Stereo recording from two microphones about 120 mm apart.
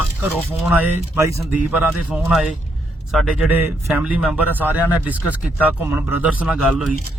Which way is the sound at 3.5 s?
15° right (ahead or behind).